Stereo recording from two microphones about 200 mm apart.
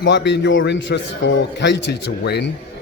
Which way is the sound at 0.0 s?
60° left (ahead or behind).